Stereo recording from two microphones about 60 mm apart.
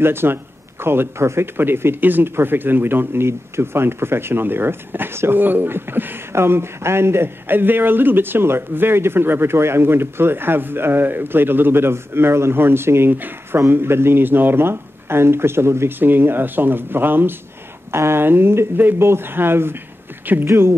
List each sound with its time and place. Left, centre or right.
0.0 s a man's voice: right
16.0 s a man's voice: right